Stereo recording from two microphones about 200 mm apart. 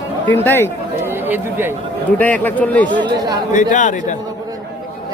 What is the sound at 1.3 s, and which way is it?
Speech, 10° right (ahead or behind).